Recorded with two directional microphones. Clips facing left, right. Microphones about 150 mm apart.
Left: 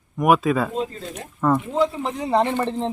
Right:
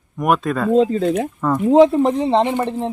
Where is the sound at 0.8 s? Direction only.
60° right (ahead or behind).